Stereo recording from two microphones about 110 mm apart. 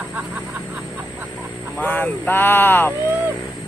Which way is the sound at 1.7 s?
15° left (ahead or behind).